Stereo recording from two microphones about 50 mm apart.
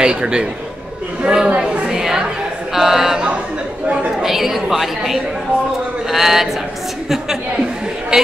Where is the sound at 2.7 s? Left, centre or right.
Centre.